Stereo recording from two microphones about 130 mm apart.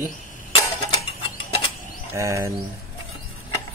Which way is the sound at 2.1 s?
20° right (ahead or behind).